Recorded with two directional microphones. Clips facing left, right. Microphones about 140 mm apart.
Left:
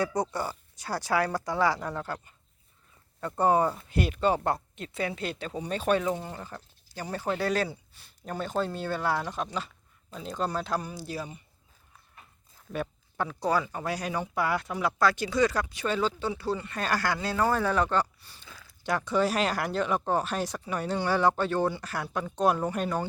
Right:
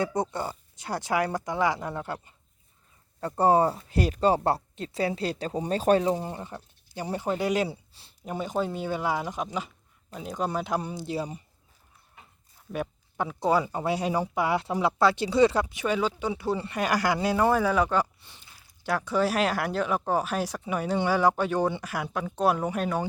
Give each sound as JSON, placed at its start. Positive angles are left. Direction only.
{"t": 0.0, "sound": "speech", "side_deg": -25}
{"t": 3.2, "sound": "speech", "side_deg": -30}
{"t": 7.7, "sound": "speech", "side_deg": -30}
{"t": 8.2, "sound": "speech", "side_deg": -10}
{"t": 12.7, "sound": "speech", "side_deg": -10}
{"t": 16.3, "sound": "speech", "side_deg": -20}
{"t": 18.2, "sound": "a sound", "side_deg": -20}
{"t": 18.8, "sound": "speech", "side_deg": -5}